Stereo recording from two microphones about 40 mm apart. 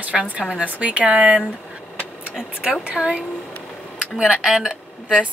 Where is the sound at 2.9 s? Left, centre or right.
Right.